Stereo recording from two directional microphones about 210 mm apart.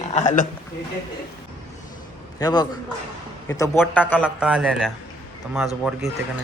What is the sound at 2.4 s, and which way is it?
A man's voice, 20° left (ahead or behind).